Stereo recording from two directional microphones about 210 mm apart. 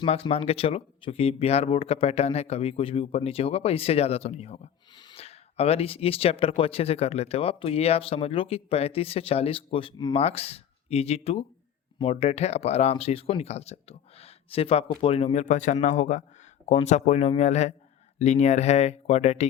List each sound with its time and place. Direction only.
0.0 s speech: 30° left (ahead or behind)